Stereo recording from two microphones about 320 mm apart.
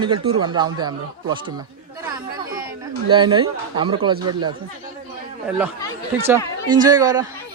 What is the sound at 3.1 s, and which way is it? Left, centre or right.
Speech, centre.